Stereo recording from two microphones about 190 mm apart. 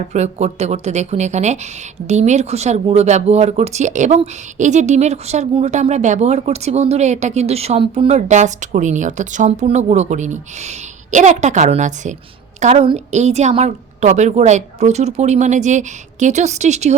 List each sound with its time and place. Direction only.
0.1 s a woman's voice: 35° right (ahead or behind)